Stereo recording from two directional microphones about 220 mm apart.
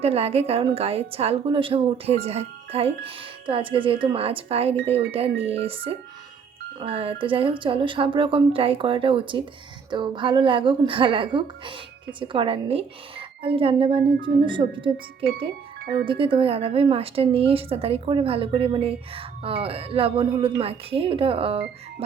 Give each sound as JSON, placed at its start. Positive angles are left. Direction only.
{"t": 0.0, "sound": "a woman's voice", "side_deg": -25}